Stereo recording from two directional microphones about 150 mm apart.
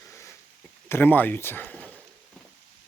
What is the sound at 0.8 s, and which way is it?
Speech, 15° left (ahead or behind).